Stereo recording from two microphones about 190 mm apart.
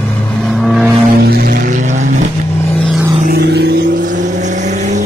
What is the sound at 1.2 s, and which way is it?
Vehicle, 55° right (ahead or behind).